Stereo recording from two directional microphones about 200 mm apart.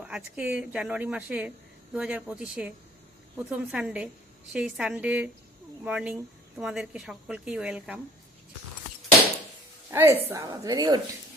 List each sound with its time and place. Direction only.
0.0 s a woman's voice: 5° right (ahead or behind)
9.9 s a woman's voice: 10° right (ahead or behind)